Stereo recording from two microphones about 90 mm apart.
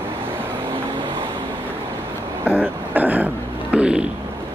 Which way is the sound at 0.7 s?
65° right (ahead or behind).